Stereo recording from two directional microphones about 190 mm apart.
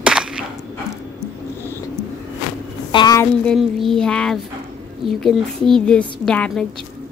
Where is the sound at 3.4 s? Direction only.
Centre (ahead or behind).